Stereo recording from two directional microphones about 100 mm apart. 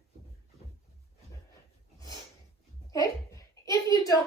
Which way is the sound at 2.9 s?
35° left (ahead or behind).